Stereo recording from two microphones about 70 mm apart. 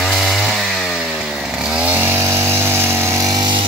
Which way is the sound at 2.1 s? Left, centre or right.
Right.